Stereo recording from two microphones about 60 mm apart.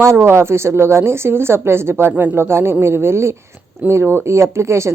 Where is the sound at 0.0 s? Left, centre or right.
Right.